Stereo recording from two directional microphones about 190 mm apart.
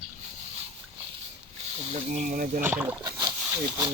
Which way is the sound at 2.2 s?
45° right (ahead or behind).